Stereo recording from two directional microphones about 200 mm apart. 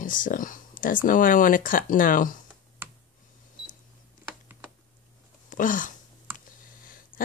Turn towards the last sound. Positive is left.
turn(degrees=45)  # may be behind; listen again after turning